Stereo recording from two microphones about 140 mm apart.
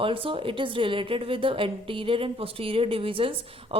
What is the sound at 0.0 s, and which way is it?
A woman's voice, 40° right (ahead or behind).